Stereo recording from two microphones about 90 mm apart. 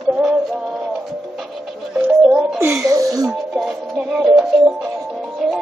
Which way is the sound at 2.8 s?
40° right (ahead or behind).